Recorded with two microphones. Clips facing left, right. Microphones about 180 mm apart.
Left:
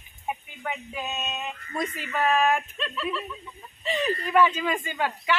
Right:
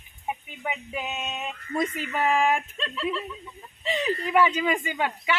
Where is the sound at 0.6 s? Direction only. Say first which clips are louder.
Right 1 dB; 10° right (ahead or behind).